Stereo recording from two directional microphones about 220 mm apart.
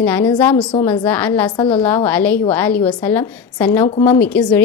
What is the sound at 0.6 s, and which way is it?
Speech, 20° left (ahead or behind).